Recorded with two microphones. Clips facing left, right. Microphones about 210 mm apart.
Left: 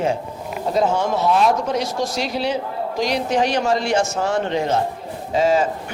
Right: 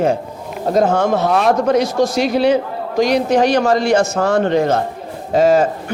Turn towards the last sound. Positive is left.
turn(degrees=-45)  # may be behind; listen again after turning